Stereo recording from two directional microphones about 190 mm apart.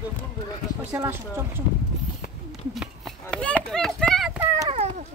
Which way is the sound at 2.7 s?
Centre (ahead or behind).